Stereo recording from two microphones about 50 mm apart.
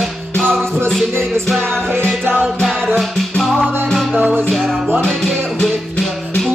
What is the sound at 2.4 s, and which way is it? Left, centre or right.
Music, centre.